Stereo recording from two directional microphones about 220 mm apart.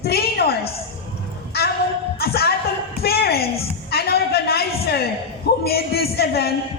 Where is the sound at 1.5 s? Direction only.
45° left (ahead or behind).